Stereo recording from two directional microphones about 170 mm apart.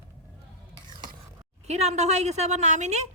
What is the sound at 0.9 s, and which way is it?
Stir, 25° right (ahead or behind).